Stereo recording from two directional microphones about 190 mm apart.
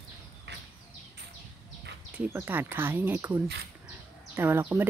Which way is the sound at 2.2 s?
10° right (ahead or behind).